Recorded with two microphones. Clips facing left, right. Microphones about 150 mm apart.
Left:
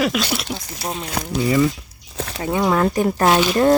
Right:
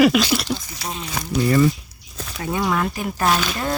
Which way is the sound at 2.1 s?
75° left (ahead or behind).